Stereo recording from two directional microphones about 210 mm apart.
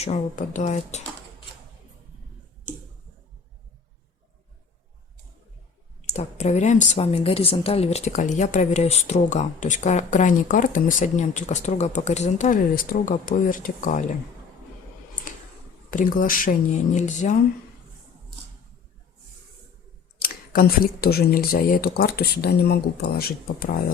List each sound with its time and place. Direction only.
0.0 s a woman's voice: 35° left (ahead or behind)
6.1 s a woman's voice: 30° left (ahead or behind)
15.9 s a woman's voice: 40° left (ahead or behind)
20.1 s speech: 45° left (ahead or behind)